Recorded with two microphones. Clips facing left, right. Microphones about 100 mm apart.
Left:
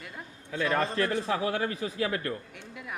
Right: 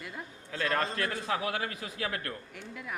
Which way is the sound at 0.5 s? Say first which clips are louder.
Left 4 dB; 15° left (ahead or behind).